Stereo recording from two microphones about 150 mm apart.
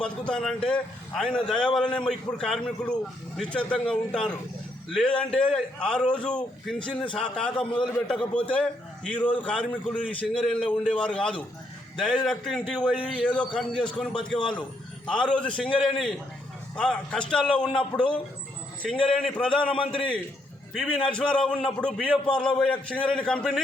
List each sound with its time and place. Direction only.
0.0 s a man's voice: 5° left (ahead or behind)
20.7 s a man's voice: 5° left (ahead or behind)